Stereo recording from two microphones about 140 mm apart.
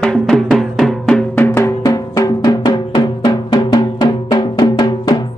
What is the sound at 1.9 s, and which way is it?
Music, 25° left (ahead or behind).